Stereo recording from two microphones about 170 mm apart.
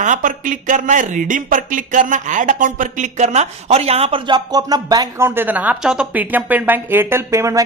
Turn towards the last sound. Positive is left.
turn(degrees=-15)  # may be behind; listen again after turning